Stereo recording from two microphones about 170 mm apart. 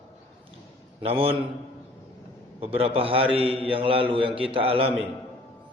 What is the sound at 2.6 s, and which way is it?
A man's voice, 35° right (ahead or behind).